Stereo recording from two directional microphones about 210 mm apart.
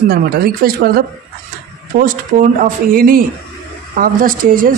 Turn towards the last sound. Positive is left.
turn(degrees=-40)  # may be behind; listen again after turning